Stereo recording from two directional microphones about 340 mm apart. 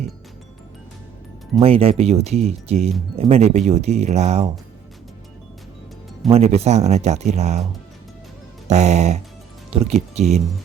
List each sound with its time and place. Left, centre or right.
1.5 s speech: centre
6.2 s speech: centre
8.7 s speech: centre